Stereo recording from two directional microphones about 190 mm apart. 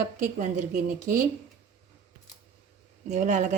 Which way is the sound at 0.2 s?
40° right (ahead or behind).